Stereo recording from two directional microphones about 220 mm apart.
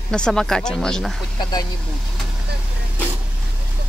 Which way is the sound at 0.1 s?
5° left (ahead or behind).